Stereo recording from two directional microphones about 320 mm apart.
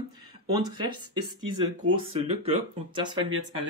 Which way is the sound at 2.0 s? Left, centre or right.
Centre.